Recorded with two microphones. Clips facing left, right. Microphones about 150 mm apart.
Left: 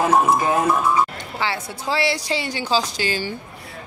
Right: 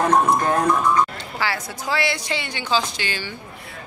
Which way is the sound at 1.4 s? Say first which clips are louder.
Left 1 dB; 25° left (ahead or behind).